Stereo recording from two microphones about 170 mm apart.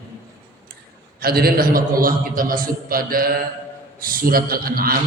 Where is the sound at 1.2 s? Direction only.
65° right (ahead or behind).